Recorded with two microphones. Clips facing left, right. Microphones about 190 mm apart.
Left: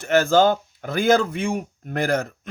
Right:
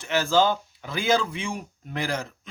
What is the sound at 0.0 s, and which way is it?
Speech, 50° left (ahead or behind).